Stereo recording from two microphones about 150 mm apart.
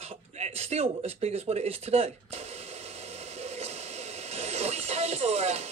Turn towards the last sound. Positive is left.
turn(degrees=-45)  # may be behind; listen again after turning